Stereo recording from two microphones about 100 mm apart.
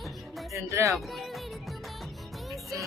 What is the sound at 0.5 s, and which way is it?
Speech, 30° right (ahead or behind).